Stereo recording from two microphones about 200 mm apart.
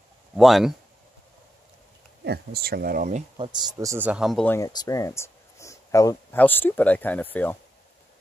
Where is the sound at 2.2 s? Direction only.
55° right (ahead or behind).